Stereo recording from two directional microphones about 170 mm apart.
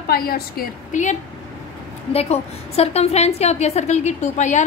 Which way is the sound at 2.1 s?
35° left (ahead or behind).